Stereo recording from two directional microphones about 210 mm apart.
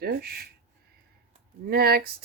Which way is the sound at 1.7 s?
45° right (ahead or behind).